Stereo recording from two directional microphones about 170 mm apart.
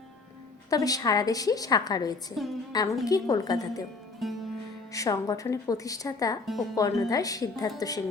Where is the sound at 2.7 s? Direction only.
20° left (ahead or behind).